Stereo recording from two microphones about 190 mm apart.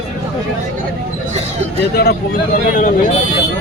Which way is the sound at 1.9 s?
55° left (ahead or behind).